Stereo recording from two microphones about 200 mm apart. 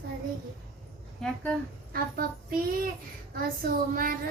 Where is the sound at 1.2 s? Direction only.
5° left (ahead or behind).